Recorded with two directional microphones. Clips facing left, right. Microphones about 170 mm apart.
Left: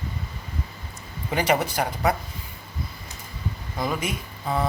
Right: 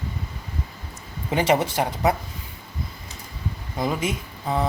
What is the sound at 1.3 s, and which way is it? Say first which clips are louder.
Speech: right 2 dB; 25° right (ahead or behind).